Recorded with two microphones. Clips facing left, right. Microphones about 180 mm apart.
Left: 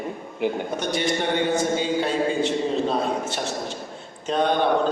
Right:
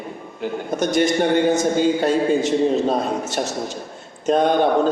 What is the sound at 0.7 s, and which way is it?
A man's voice, 45° right (ahead or behind).